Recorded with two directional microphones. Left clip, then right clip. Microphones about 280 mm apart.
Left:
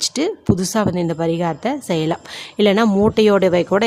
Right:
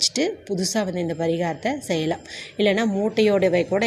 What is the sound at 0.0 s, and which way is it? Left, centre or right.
A woman's voice, centre.